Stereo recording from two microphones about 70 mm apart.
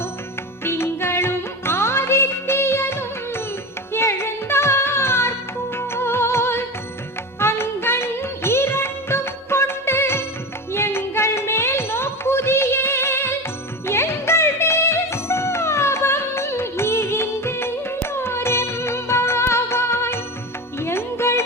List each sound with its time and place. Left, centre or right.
0.6 s music: left